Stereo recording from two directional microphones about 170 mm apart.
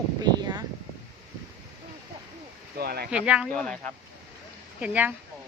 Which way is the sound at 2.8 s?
65° right (ahead or behind).